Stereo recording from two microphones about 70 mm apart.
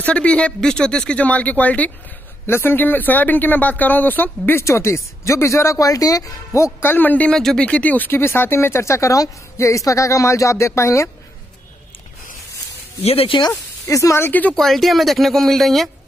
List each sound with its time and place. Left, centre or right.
0.0 s speech: centre
2.4 s speech: left
4.6 s speech: left
7.2 s speech: centre; by 11.1 s left
13.8 s speech: left
14.2 s speech: left
14.5 s speech: centre